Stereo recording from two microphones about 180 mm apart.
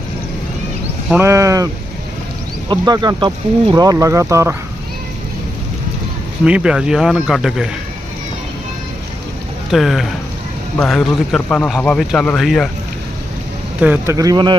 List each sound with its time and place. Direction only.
1.1 s speech: 15° right (ahead or behind)
6.4 s speech: 5° right (ahead or behind)
9.7 s speech: centre (ahead or behind)
13.8 s speech: 10° right (ahead or behind)